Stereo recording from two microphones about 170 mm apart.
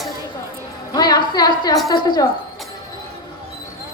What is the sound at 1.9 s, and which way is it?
Speech, 25° left (ahead or behind).